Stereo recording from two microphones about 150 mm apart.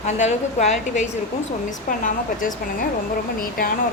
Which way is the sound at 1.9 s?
60° left (ahead or behind).